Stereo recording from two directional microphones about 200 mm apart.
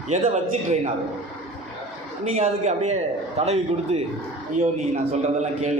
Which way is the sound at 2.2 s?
35° right (ahead or behind).